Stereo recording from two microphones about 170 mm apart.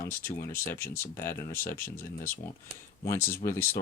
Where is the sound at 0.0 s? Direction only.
10° left (ahead or behind).